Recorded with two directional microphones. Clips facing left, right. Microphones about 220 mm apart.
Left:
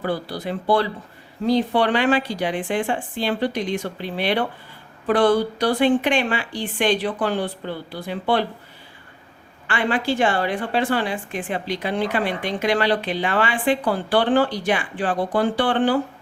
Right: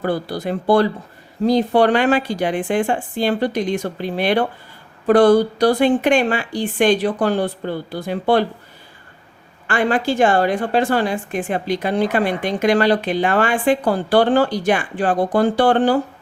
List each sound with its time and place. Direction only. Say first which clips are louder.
0.0 s a woman's voice: right 4 dB; 45° right (ahead or behind)
9.6 s a woman's voice: right 4 dB; 45° right (ahead or behind)